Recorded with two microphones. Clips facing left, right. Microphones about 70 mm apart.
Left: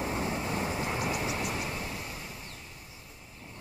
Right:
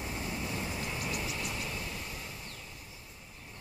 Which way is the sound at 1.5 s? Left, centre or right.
Left.